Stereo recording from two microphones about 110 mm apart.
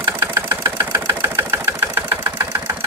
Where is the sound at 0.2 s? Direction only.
30° right (ahead or behind).